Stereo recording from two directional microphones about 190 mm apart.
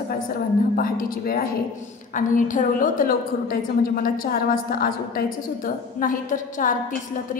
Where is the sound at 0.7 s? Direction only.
50° left (ahead or behind).